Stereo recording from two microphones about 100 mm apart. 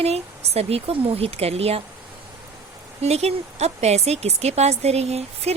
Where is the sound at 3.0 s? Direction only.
90° right.